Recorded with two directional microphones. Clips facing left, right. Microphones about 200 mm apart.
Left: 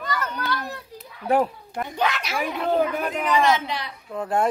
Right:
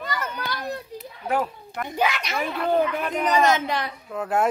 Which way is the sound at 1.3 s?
30° left (ahead or behind).